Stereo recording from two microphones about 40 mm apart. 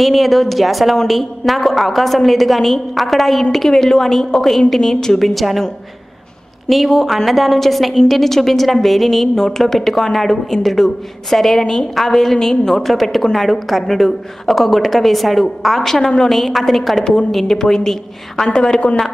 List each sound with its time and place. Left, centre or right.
0.0 s a woman's voice: centre
5.3 s speech: centre
6.7 s a woman's voice: centre; by 18.9 s left